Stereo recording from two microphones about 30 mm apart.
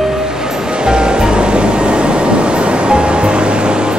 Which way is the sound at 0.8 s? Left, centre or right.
Right.